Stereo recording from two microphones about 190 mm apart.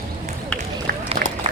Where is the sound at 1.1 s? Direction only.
40° right (ahead or behind).